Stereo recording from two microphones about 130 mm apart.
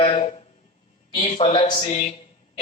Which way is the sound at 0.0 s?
45° left (ahead or behind).